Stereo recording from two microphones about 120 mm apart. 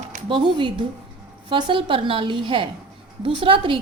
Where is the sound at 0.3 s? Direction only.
45° right (ahead or behind).